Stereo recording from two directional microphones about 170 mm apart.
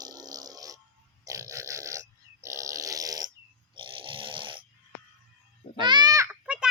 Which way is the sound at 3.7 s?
30° right (ahead or behind).